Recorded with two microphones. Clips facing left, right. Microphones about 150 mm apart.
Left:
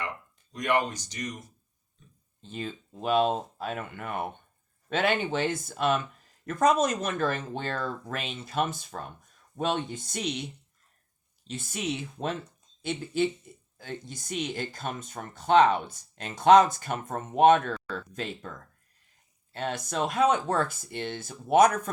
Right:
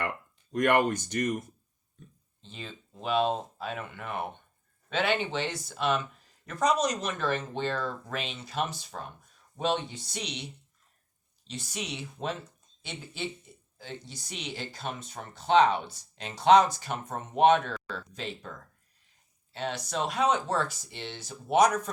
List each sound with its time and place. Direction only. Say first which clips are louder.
0.5 s speech: right 3 dB; 55° right (ahead or behind)
2.4 s speech: left 7 dB; 50° left (ahead or behind)
19.5 s speech: left 2 dB; 50° left (ahead or behind)